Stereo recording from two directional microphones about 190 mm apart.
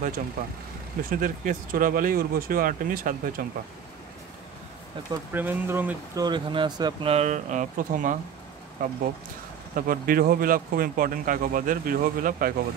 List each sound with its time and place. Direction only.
1.1 s speech: 45° right (ahead or behind)
5.1 s speech: 10° right (ahead or behind)
6.2 s speech: 25° right (ahead or behind); by 12.5 s 45° right (ahead or behind)